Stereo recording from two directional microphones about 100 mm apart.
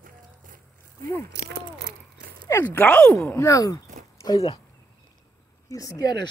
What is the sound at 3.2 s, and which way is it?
Speech, 30° left (ahead or behind).